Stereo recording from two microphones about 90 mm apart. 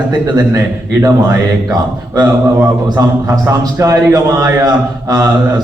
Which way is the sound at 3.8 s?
35° right (ahead or behind).